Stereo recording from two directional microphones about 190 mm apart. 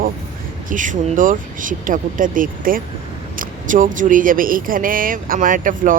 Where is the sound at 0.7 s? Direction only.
40° right (ahead or behind).